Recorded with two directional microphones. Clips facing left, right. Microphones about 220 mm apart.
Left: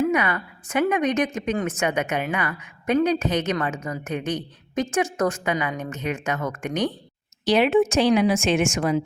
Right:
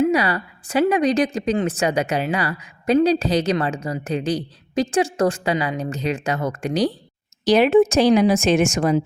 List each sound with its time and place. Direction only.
0.1 s a woman's voice: 35° right (ahead or behind)